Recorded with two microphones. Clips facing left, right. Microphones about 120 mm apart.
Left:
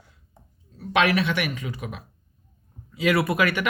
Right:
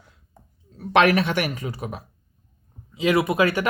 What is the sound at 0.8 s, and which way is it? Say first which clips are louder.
Speech: right 4 dB; 50° right (ahead or behind).